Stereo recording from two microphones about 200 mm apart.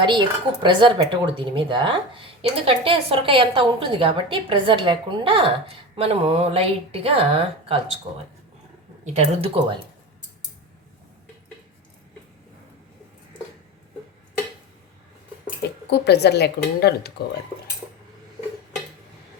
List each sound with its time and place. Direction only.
0.0 s speech: 20° right (ahead or behind)
9.1 s speech: 30° right (ahead or behind)
15.9 s speech: 55° left (ahead or behind)